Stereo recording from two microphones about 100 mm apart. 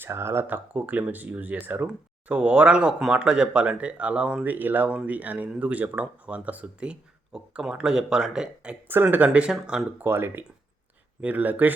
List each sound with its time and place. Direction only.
0.0 s speech: 25° right (ahead or behind); by 8.7 s 5° right (ahead or behind)
8.9 s speech: 20° right (ahead or behind)
10.0 s speech: 25° right (ahead or behind)